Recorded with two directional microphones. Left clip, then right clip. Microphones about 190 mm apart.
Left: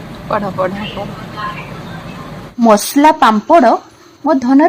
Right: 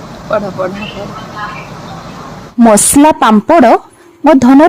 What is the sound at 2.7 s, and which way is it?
Speech, 45° right (ahead or behind).